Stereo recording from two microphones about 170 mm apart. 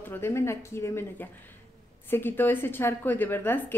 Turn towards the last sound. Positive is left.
turn(degrees=10)  # may be behind; listen again after turning